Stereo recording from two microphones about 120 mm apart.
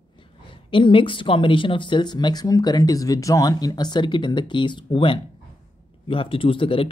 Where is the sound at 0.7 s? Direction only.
45° left (ahead or behind).